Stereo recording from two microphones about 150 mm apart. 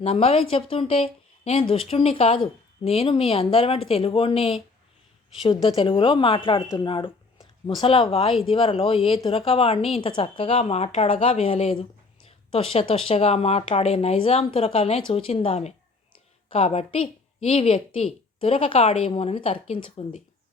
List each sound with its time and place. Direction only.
0.0 s a woman's voice: 40° left (ahead or behind)
5.6 s a woman's voice: 35° left (ahead or behind)